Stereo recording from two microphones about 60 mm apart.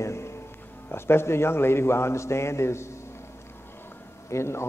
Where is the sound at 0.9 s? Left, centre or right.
Left.